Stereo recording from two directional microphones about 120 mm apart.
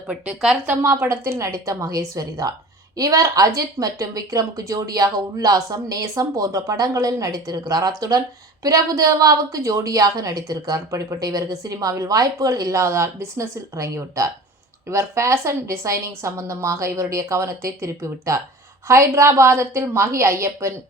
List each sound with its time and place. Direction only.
0.1 s a woman's voice: 5° right (ahead or behind)
0.8 s a woman's voice: 20° right (ahead or behind)